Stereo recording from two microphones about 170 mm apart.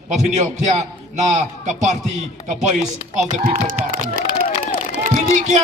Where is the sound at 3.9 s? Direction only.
55° right (ahead or behind).